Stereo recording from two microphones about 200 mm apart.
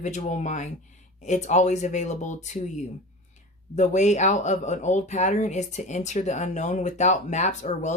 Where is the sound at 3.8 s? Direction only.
35° left (ahead or behind).